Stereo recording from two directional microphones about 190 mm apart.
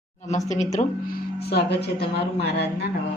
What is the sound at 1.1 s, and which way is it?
Speech, 60° left (ahead or behind).